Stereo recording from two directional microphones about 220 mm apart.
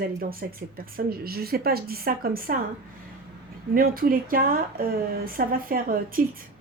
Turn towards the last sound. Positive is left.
turn(degrees=-40)  # may be behind; listen again after turning